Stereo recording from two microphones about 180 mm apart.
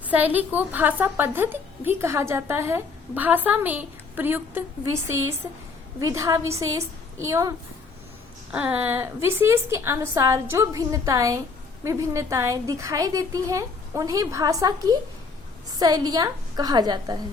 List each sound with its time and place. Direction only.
0.1 s a woman's voice: 10° right (ahead or behind)
8.5 s a woman's voice: 10° right (ahead or behind)